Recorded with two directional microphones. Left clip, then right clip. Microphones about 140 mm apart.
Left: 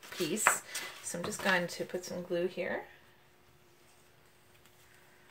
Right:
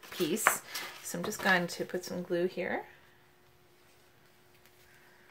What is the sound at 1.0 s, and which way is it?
Speech, 30° right (ahead or behind).